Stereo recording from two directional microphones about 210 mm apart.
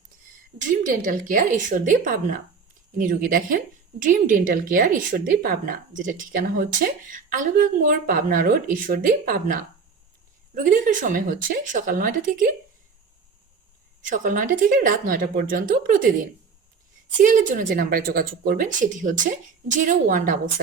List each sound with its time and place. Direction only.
0.9 s a woman's voice: 40° right (ahead or behind)
14.1 s a woman's voice: 40° right (ahead or behind)
17.2 s a woman's voice: 40° right (ahead or behind)